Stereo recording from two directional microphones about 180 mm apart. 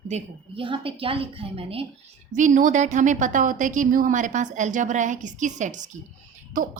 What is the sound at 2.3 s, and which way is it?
A woman's voice, 45° right (ahead or behind).